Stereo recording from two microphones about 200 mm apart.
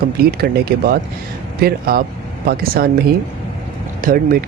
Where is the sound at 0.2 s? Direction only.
50° right (ahead or behind).